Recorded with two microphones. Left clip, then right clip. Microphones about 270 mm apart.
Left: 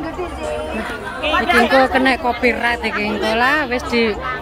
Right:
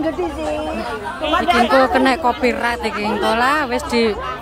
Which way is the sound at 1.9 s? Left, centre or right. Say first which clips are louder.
Right 1 dB; centre.